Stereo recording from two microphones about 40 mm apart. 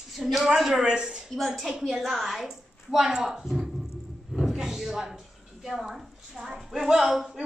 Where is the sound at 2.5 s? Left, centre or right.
Centre.